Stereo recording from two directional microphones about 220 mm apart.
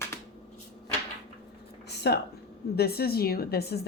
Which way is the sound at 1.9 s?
50° left (ahead or behind).